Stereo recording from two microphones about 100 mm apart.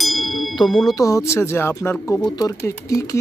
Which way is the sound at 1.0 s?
30° left (ahead or behind).